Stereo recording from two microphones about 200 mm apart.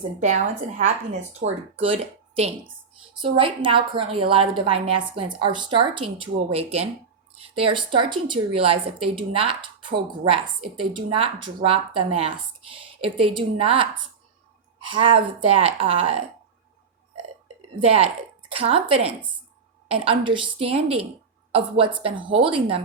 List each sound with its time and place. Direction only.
0.2 s a woman's voice: 35° right (ahead or behind)
1.4 s speech: 50° right (ahead or behind)
1.8 s a woman's voice: 30° right (ahead or behind)
14.8 s a woman's voice: 25° right (ahead or behind)
17.7 s a woman's voice: 30° right (ahead or behind)